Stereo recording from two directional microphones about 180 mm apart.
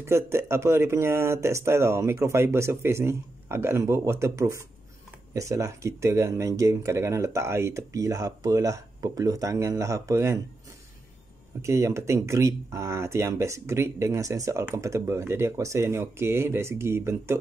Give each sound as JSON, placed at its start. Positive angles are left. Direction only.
{"t": 0.0, "sound": "speech", "side_deg": -15}
{"t": 11.6, "sound": "speech", "side_deg": -15}